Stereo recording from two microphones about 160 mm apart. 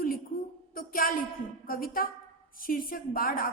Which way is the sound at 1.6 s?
65° left (ahead or behind).